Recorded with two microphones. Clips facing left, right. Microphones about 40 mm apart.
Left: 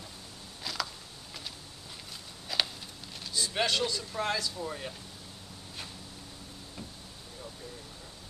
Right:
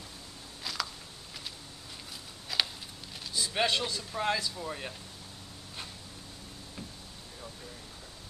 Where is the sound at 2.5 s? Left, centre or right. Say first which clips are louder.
Even; centre.